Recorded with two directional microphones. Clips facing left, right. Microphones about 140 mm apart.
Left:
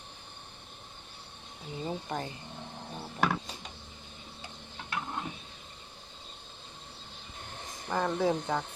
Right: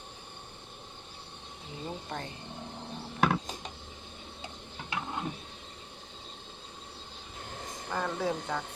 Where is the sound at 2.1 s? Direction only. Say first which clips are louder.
Left 3 dB; 10° left (ahead or behind).